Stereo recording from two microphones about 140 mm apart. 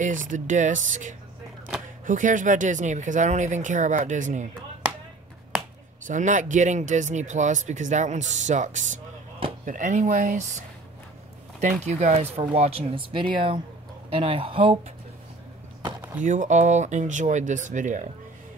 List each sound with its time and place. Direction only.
0.0 s speech: 70° right (ahead or behind)
6.0 s speech: 65° right (ahead or behind)
11.8 s speech: 55° right (ahead or behind)
16.2 s speech: 60° right (ahead or behind)